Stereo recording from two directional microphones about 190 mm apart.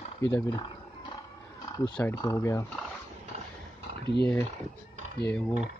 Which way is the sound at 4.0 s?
60° left (ahead or behind).